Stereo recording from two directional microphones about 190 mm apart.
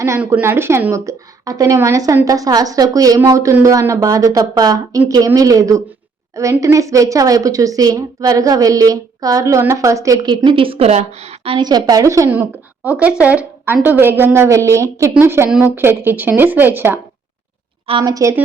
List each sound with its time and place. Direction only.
0.0 s a woman's voice: 15° right (ahead or behind)
17.8 s a woman's voice: 25° right (ahead or behind)